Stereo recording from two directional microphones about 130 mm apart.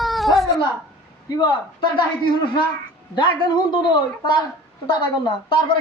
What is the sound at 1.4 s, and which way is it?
A man's voice, 35° left (ahead or behind).